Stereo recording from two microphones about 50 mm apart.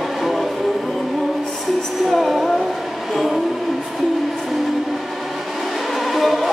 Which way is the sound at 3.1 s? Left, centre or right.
Centre.